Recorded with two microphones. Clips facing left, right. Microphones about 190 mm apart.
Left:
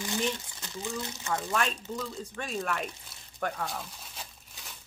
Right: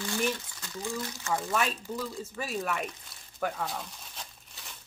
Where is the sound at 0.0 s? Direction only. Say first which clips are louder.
Right 1 dB; 20° left (ahead or behind).